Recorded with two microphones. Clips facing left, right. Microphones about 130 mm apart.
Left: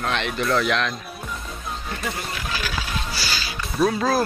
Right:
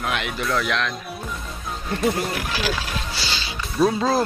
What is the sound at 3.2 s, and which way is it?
Music, 25° right (ahead or behind).